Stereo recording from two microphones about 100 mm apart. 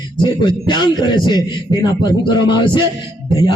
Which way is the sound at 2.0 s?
50° left (ahead or behind).